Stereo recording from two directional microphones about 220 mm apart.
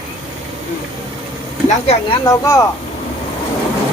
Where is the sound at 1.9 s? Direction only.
20° left (ahead or behind).